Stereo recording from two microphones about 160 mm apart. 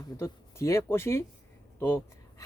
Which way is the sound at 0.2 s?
15° left (ahead or behind).